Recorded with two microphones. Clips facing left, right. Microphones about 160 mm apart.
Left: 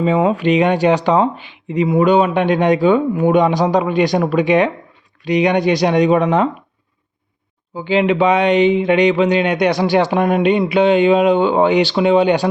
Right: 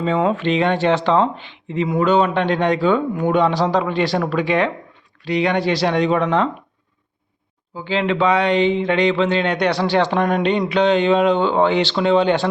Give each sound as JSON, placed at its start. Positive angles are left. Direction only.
{"t": 0.0, "sound": "speech", "side_deg": 10}
{"t": 7.8, "sound": "speech", "side_deg": 15}